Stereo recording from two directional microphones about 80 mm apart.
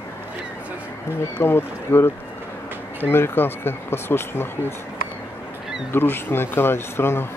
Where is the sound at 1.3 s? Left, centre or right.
Left.